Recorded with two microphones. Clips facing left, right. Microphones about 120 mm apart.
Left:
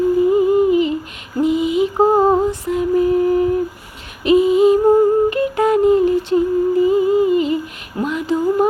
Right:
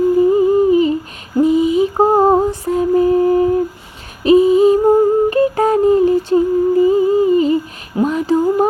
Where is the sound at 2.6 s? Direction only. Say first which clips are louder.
Right 3 dB; 40° right (ahead or behind).